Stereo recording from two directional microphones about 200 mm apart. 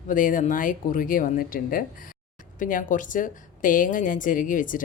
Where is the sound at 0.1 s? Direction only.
40° left (ahead or behind).